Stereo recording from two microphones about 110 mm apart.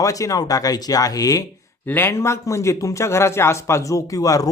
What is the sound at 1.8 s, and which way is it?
A man's voice, 20° left (ahead or behind).